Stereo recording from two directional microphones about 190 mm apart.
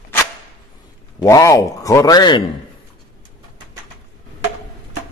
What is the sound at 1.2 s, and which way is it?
Speech, 15° left (ahead or behind).